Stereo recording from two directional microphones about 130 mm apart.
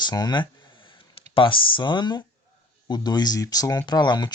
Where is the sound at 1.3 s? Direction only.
40° left (ahead or behind).